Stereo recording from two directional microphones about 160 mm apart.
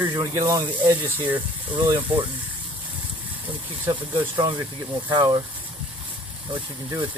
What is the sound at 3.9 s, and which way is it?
Speech, 25° right (ahead or behind).